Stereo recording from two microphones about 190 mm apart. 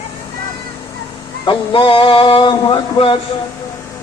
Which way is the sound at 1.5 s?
25° left (ahead or behind).